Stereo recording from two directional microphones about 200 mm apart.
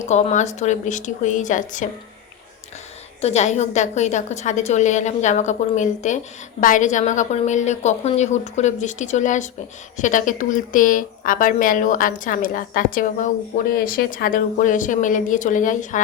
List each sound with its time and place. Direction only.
0.0 s a woman's voice: 35° left (ahead or behind)
3.2 s a woman's voice: 35° left (ahead or behind)